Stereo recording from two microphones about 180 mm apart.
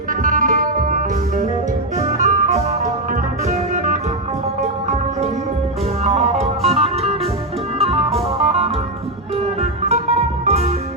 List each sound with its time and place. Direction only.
0.1 s music: 50° right (ahead or behind)
6.1 s music: 35° right (ahead or behind)